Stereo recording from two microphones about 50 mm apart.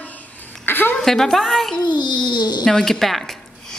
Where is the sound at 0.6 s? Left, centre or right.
Left.